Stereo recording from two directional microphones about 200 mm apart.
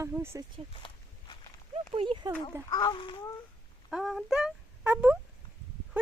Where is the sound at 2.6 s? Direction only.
20° left (ahead or behind).